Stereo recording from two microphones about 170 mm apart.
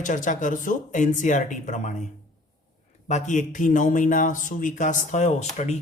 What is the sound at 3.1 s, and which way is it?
A man's voice, 45° left (ahead or behind).